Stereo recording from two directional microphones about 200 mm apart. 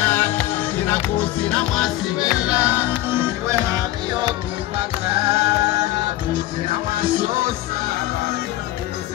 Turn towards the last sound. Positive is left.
turn(degrees=-45)  # may be behind; listen again after turning